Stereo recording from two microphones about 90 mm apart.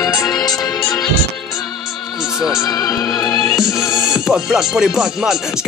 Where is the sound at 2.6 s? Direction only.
45° left (ahead or behind).